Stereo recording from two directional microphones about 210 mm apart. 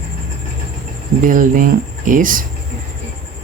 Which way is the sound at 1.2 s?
40° right (ahead or behind).